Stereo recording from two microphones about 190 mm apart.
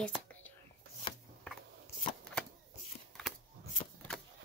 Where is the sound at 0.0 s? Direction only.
5° left (ahead or behind).